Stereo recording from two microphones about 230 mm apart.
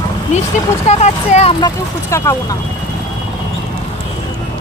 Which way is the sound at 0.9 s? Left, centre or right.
Left.